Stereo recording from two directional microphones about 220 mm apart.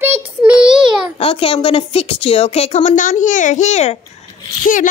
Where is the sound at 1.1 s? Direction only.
25° left (ahead or behind).